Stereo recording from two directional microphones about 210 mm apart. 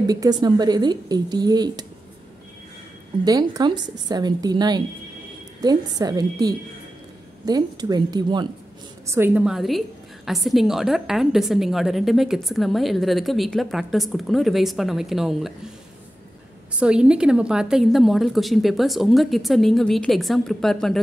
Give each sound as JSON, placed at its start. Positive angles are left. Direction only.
{"t": 0.0, "sound": "speech", "side_deg": -20}
{"t": 3.3, "sound": "a woman's voice", "side_deg": -15}
{"t": 9.1, "sound": "a woman's voice", "side_deg": -10}
{"t": 16.8, "sound": "a woman's voice", "side_deg": -5}